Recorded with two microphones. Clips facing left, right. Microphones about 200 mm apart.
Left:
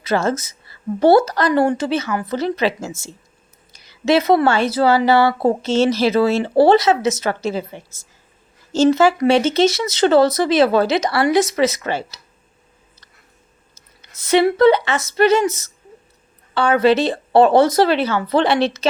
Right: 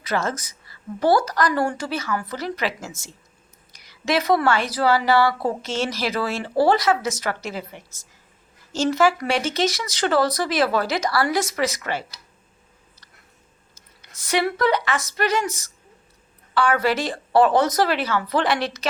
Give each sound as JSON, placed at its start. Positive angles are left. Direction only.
{"t": 0.0, "sound": "a woman's voice", "side_deg": 25}
{"t": 14.2, "sound": "a woman's voice", "side_deg": 25}